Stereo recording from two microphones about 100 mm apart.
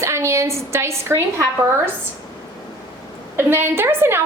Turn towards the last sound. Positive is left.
turn(degrees=-25)  # may be behind; listen again after turning